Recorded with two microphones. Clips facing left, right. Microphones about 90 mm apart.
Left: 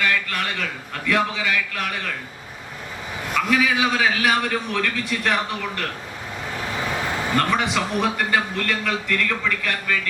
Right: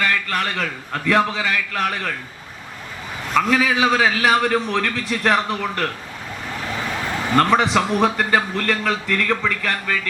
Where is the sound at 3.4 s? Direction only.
40° right (ahead or behind).